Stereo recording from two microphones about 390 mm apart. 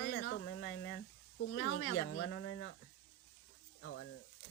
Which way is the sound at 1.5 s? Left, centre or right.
Left.